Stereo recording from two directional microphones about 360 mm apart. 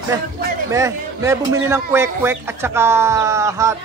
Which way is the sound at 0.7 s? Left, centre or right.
Centre.